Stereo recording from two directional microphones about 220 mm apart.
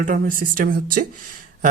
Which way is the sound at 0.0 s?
40° right (ahead or behind).